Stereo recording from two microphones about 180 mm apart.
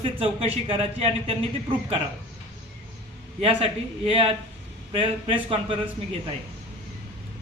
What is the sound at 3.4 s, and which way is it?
Speech, 30° right (ahead or behind).